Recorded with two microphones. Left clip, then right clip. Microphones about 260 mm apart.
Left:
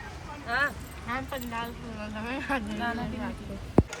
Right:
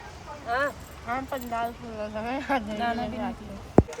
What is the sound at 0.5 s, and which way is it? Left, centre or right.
Speech, right.